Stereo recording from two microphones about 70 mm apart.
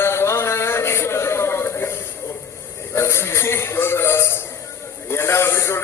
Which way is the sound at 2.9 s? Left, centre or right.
Left.